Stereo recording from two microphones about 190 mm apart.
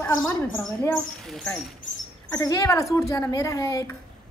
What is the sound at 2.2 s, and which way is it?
Speech, 20° left (ahead or behind).